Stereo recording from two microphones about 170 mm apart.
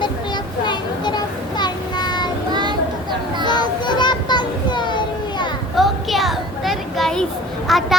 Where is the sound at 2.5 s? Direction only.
25° right (ahead or behind).